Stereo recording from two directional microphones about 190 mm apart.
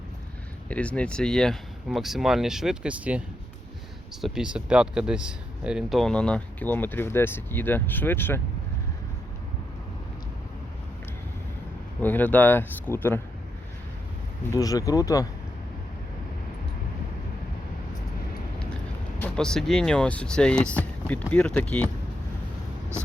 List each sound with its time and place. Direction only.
0.7 s speech: 5° left (ahead or behind)
12.0 s speech: 10° left (ahead or behind)
14.5 s speech: 20° left (ahead or behind)
19.2 s speech: 5° left (ahead or behind)